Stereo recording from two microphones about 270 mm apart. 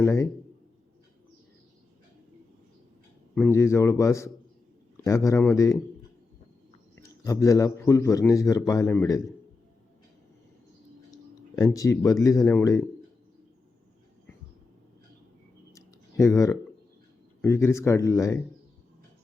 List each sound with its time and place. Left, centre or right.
0.0 s a man's voice: centre
3.3 s a man's voice: centre
7.0 s a man's voice: centre
11.5 s a man's voice: centre
15.7 s a sound: centre
17.4 s a man's voice: centre